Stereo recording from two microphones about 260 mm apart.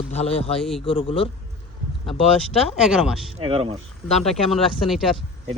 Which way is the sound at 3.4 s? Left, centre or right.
Right.